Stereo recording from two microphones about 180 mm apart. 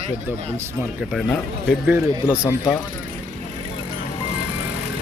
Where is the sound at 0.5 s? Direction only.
15° right (ahead or behind).